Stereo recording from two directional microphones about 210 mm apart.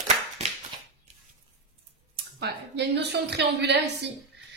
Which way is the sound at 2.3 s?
55° right (ahead or behind).